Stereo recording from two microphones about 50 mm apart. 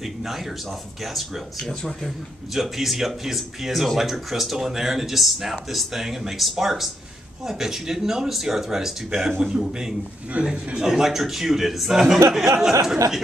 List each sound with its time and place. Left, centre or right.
0.0 s speech: centre
1.7 s speech: centre
2.5 s speech: centre
10.4 s a man's voice: right
10.8 s speech: centre